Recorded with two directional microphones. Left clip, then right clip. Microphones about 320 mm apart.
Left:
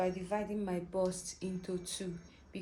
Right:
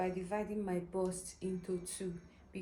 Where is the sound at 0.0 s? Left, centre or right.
Left.